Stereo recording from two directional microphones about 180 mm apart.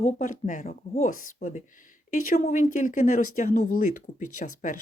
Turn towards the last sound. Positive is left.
turn(degrees=45)  # may be behind; listen again after turning